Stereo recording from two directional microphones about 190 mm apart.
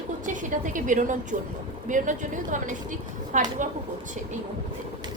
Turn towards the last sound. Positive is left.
turn(degrees=-40)  # may be behind; listen again after turning